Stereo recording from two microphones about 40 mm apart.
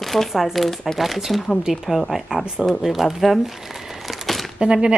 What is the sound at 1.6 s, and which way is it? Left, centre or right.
Speech, centre.